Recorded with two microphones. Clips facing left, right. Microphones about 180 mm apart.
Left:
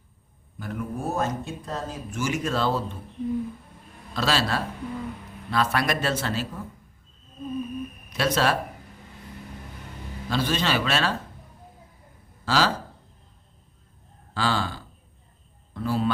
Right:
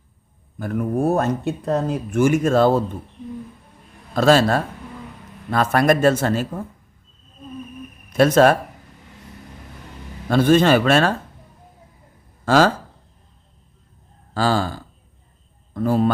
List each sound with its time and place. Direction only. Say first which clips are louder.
0.6 s speech: right 10 dB; 50° right (ahead or behind)
4.1 s speech: right 10 dB; 50° right (ahead or behind)
8.1 s speech: right 10 dB; 50° right (ahead or behind)
10.2 s speech: right 11 dB; 50° right (ahead or behind)
12.5 s speech: right 8 dB; 50° right (ahead or behind)
14.3 s a man's voice: right 6 dB; 45° right (ahead or behind)